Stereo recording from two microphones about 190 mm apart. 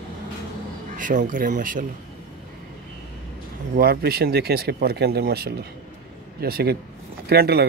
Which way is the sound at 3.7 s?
55° right (ahead or behind).